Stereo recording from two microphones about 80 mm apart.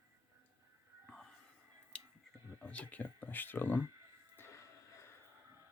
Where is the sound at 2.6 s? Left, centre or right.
Centre.